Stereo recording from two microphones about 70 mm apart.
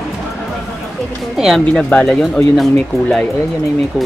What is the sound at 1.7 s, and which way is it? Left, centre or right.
Speech, centre.